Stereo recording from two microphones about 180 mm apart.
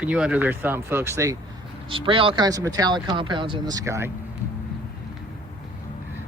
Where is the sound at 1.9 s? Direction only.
30° right (ahead or behind).